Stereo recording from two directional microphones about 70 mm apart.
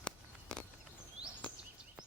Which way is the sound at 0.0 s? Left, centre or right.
Centre.